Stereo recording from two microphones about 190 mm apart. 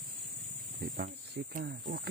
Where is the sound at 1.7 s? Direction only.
55° right (ahead or behind).